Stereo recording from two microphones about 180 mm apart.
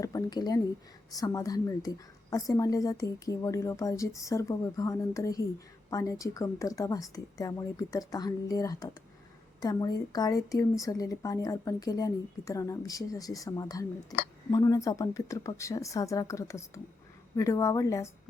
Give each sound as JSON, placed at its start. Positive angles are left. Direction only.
{"t": 0.0, "sound": "a woman's voice", "side_deg": 20}